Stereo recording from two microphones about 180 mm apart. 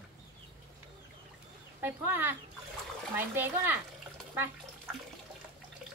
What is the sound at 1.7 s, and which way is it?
Speech, 10° right (ahead or behind).